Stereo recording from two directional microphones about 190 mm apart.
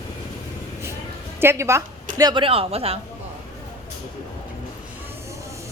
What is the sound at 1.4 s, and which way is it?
Speech, 15° right (ahead or behind).